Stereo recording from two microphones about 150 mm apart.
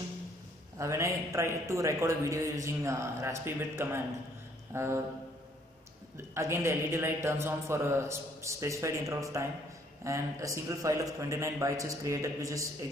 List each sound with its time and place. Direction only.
0.7 s a man's voice: 20° right (ahead or behind)
4.7 s a sound: 15° right (ahead or behind)
6.1 s a man's voice: 20° right (ahead or behind)